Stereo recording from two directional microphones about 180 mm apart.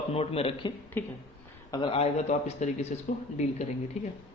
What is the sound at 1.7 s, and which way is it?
Speech, 30° left (ahead or behind).